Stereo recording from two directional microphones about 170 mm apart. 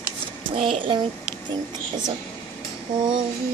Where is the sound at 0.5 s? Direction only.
30° right (ahead or behind).